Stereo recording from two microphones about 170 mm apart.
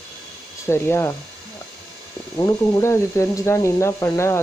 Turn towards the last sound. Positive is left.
turn(degrees=15)  # may be behind; listen again after turning